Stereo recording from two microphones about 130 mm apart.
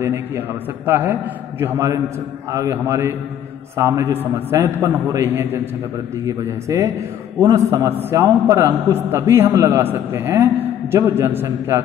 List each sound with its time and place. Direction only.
0.0 s a man's voice: 20° right (ahead or behind)